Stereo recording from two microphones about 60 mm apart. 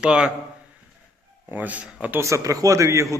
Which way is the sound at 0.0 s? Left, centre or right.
Centre.